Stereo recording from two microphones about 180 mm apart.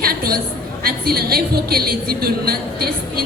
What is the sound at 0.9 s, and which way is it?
A woman's voice, 60° right (ahead or behind).